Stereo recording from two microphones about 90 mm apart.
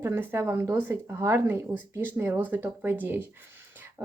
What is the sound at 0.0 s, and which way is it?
Speech, 25° right (ahead or behind).